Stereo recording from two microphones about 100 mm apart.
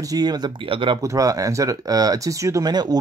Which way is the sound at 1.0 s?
35° right (ahead or behind).